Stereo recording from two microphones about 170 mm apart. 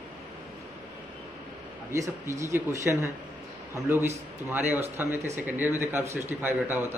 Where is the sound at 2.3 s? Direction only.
15° right (ahead or behind).